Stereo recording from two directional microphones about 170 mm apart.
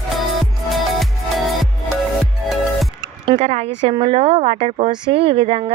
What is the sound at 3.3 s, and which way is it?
A woman's voice, 40° right (ahead or behind).